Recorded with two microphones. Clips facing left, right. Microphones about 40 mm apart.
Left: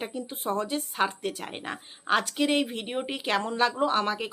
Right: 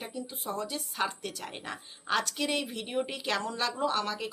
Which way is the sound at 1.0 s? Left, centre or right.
Left.